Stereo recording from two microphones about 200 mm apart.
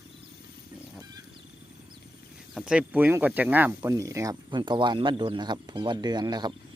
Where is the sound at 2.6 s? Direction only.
5° right (ahead or behind).